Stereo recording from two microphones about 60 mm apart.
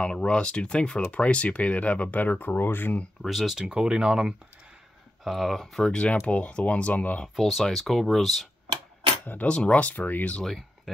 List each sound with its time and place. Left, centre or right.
0.0 s speech: centre; by 3.1 s left
3.2 s speech: centre
6.2 s speech: left
7.3 s speech: centre
9.2 s speech: left